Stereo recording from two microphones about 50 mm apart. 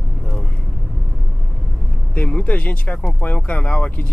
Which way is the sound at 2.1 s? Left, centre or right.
Left.